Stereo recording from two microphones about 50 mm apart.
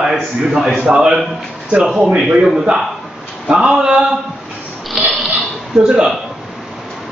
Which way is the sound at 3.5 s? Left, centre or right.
Centre.